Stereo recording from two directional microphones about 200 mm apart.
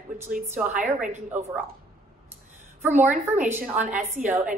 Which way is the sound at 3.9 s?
35° right (ahead or behind).